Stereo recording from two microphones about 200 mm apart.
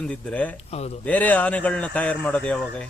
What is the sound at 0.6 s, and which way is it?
Speech, 30° left (ahead or behind).